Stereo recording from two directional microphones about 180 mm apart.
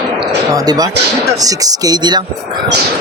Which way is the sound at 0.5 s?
20° right (ahead or behind).